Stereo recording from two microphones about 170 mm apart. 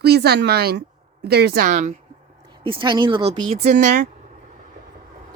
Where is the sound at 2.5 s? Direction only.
30° right (ahead or behind); by 4.0 s 45° right (ahead or behind).